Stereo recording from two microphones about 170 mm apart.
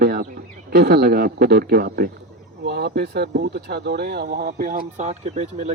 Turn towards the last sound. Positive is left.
turn(degrees=-40)  # may be behind; listen again after turning